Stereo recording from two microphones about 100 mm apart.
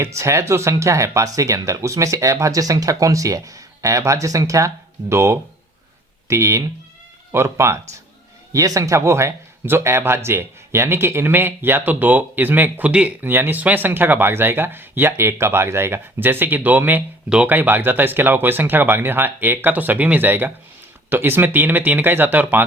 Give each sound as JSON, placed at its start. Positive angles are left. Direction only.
{"t": 0.0, "sound": "speech", "side_deg": -30}